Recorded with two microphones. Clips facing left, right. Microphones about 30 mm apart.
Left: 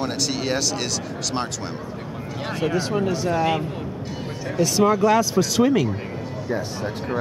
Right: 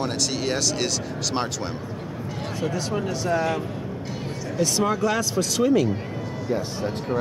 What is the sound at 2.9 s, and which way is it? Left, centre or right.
Speech, centre.